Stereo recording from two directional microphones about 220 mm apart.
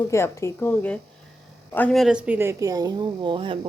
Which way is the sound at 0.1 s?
15° left (ahead or behind).